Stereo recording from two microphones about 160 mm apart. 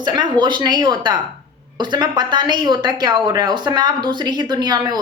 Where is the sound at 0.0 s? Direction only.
30° right (ahead or behind).